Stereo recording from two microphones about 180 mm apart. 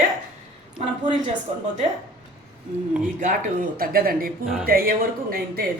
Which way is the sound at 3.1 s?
50° right (ahead or behind).